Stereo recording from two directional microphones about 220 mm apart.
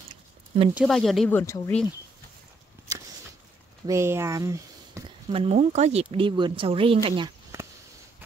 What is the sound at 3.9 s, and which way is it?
Speech, 10° right (ahead or behind).